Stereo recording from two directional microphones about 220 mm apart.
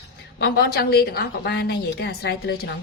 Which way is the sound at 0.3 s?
45° left (ahead or behind).